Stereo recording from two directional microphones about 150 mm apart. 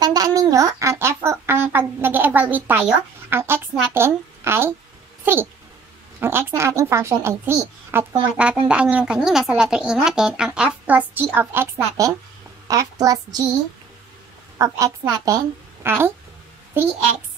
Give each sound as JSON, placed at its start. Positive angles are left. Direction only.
{"t": 0.0, "sound": "a woman's voice", "side_deg": -25}
{"t": 14.6, "sound": "a woman's voice", "side_deg": -25}